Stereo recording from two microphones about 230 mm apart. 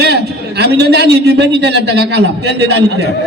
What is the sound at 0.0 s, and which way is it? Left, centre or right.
A man's voice, right.